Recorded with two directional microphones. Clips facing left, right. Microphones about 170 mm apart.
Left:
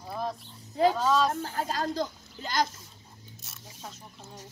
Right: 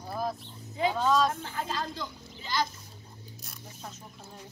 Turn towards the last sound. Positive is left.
turn(degrees=0)  # may be behind; listen again after turning